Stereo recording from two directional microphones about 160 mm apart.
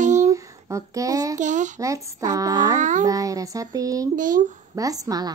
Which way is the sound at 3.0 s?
20° right (ahead or behind).